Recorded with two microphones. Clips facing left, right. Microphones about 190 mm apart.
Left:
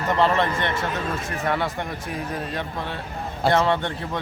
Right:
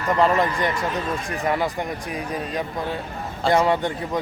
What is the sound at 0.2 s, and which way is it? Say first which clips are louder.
Speech: right 2 dB; 5° right (ahead or behind).